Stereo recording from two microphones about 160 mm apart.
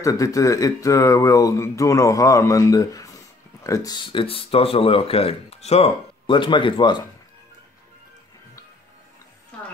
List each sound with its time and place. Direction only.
0.0 s speech: 20° left (ahead or behind)